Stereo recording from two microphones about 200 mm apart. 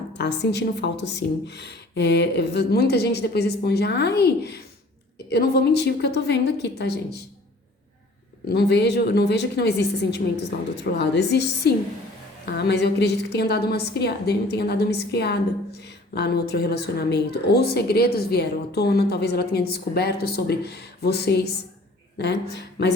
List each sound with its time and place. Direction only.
0.2 s a woman's voice: 60° left (ahead or behind)
8.4 s a woman's voice: 55° left (ahead or behind)